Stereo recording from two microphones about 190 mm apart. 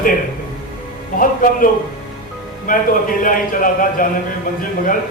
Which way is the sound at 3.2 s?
45° left (ahead or behind).